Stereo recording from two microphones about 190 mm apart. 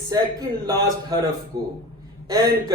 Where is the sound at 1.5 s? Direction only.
20° right (ahead or behind).